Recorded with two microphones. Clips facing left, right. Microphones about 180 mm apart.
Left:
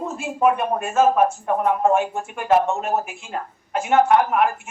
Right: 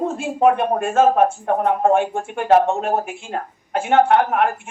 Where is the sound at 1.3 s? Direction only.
35° right (ahead or behind).